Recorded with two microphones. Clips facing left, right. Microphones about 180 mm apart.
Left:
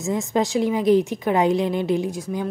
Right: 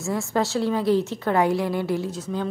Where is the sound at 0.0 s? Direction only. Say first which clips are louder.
Left 2 dB; 15° left (ahead or behind).